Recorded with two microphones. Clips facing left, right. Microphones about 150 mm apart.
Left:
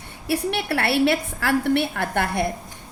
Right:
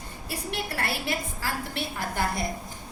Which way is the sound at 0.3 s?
70° left (ahead or behind).